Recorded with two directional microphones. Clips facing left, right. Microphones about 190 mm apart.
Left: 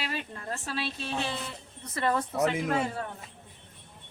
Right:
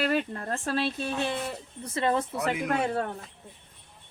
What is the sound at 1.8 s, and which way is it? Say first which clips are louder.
Speech: right 2 dB; 25° right (ahead or behind).